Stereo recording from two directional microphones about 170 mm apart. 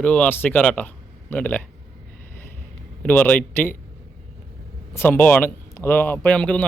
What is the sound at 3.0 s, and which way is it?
Speech, 10° left (ahead or behind).